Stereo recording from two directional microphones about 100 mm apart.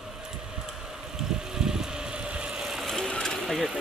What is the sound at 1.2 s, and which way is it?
Vehicle, 5° right (ahead or behind).